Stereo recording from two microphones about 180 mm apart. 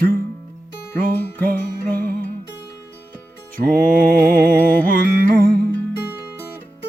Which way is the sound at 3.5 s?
50° right (ahead or behind).